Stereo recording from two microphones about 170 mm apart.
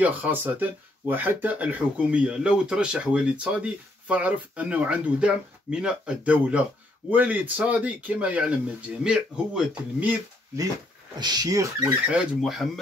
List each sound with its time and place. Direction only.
0.0 s speech: 10° right (ahead or behind)
11.1 s speech: 25° right (ahead or behind)
12.1 s speech: centre (ahead or behind)